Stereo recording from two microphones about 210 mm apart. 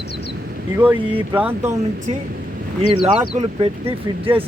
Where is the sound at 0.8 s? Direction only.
10° right (ahead or behind).